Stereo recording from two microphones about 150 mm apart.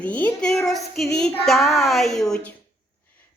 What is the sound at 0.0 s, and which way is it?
A woman's voice, 10° left (ahead or behind).